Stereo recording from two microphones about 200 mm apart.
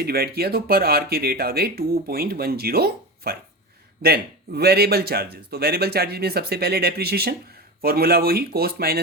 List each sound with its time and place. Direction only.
0.0 s a man's voice: 50° right (ahead or behind)